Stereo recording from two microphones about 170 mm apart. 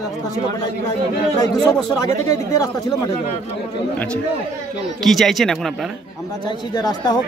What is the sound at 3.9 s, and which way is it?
Speech, 5° left (ahead or behind).